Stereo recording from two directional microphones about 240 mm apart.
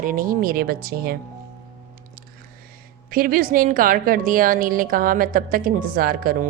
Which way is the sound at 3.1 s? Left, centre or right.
Right.